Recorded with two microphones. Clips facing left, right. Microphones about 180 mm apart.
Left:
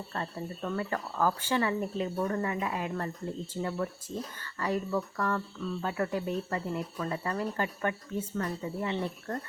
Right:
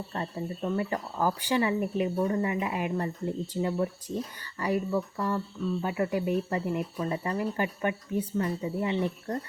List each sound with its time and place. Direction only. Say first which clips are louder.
0.1 s speech: right 2 dB; 20° right (ahead or behind)